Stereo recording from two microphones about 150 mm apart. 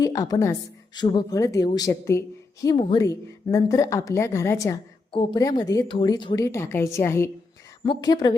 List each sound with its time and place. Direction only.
0.0 s a woman's voice: 25° left (ahead or behind)
7.9 s a woman's voice: 25° left (ahead or behind)